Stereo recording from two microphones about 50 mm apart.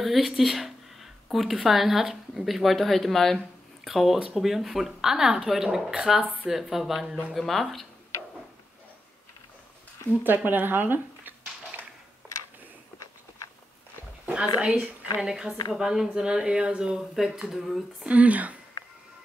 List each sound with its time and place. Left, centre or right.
0.0 s speech: centre
10.2 s speech: right
14.2 s a woman's voice: right; by 17.8 s centre
18.0 s speech: right